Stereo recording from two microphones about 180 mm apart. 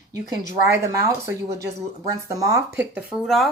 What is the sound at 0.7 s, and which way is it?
Speech, 15° right (ahead or behind).